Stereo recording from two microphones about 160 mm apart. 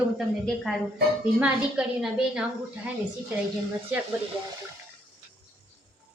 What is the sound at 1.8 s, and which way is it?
Speech, 5° right (ahead or behind).